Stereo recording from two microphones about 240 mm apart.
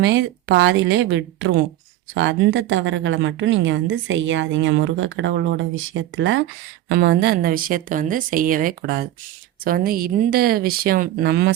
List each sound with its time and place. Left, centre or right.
0.0 s a woman's voice: right